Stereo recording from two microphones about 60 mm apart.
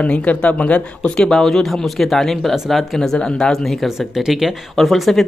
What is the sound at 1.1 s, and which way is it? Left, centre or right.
A man's voice, centre.